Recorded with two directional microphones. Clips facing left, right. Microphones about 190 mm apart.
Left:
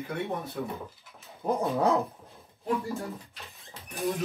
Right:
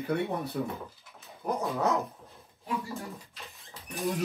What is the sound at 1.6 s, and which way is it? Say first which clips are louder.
Dog: left 3 dB; 30° left (ahead or behind).